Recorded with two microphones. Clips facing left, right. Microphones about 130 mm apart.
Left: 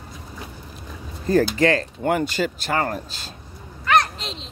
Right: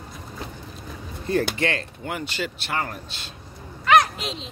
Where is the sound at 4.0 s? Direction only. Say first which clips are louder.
Right 1 dB; 5° right (ahead or behind).